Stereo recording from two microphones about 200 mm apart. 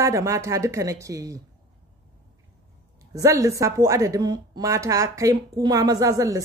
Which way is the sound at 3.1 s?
15° right (ahead or behind).